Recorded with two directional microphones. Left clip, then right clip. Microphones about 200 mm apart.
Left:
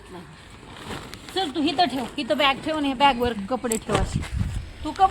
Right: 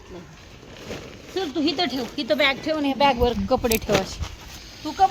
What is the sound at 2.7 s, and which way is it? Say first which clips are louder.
Speech: right 1 dB; 20° left (ahead or behind).